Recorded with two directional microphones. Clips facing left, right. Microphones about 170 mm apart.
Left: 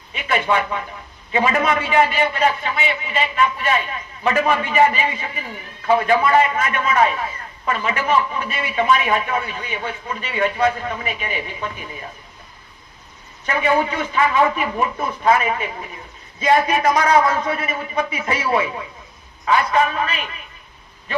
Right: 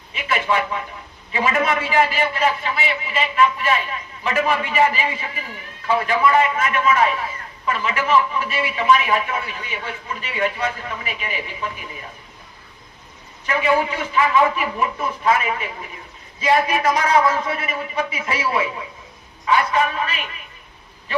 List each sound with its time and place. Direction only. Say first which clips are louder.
0.1 s a man's voice: left 2 dB; 35° left (ahead or behind)
13.5 s a man's voice: left 1 dB; 35° left (ahead or behind)